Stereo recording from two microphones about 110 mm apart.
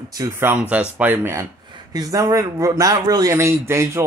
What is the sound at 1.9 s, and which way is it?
A man's voice, 35° right (ahead or behind).